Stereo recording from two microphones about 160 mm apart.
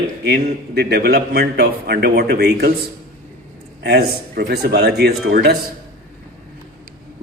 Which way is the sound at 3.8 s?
80° right.